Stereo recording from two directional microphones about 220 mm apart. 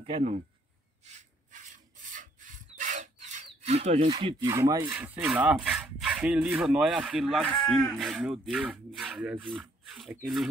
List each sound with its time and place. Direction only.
0.0 s speech: 30° right (ahead or behind)
1.0 s rub: 35° right (ahead or behind); by 9.4 s 5° right (ahead or behind)
9.5 s speech: centre (ahead or behind)